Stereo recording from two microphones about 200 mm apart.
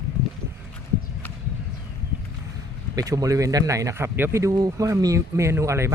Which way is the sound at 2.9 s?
20° right (ahead or behind).